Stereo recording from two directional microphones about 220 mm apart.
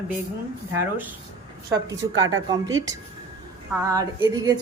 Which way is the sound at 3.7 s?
15° right (ahead or behind).